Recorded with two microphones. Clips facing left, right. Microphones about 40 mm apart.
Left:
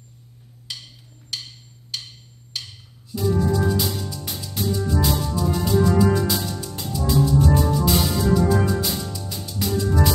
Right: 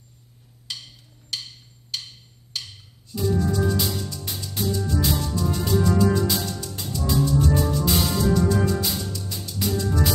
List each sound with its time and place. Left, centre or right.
0.7 s wood block: centre
3.1 s music: centre